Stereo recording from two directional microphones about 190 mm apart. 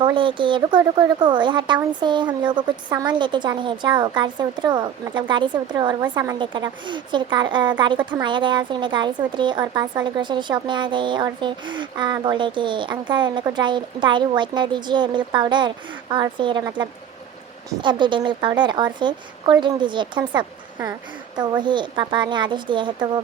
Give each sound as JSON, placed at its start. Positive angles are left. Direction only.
{"t": 0.0, "sound": "speech", "side_deg": -25}